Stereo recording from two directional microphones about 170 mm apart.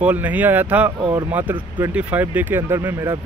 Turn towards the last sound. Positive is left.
turn(degrees=-15)  # may be behind; listen again after turning